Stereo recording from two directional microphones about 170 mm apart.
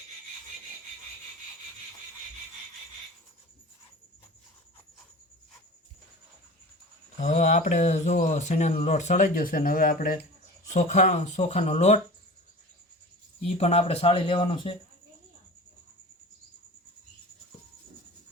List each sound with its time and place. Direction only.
7.2 s speech: 45° left (ahead or behind)
10.7 s speech: 45° left (ahead or behind)
13.4 s speech: 40° left (ahead or behind)